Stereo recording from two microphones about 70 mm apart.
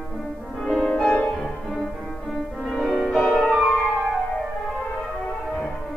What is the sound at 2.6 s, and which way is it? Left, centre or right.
Music, centre.